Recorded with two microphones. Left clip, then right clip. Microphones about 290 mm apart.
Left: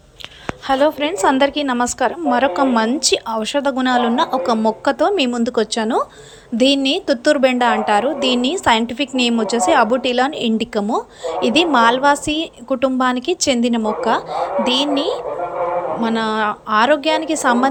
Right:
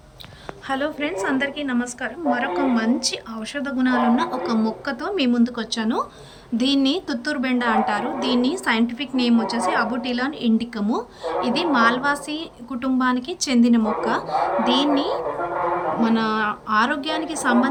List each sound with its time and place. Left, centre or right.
0.7 s speech: centre